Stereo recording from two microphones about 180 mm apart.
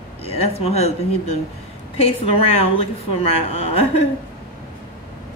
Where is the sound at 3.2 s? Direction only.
35° left (ahead or behind).